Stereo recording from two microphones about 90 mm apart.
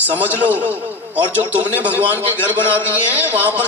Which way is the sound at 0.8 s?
20° right (ahead or behind).